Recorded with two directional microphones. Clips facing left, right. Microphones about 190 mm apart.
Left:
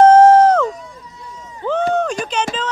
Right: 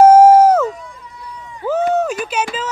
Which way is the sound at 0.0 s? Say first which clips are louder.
Right 1 dB; 10° right (ahead or behind).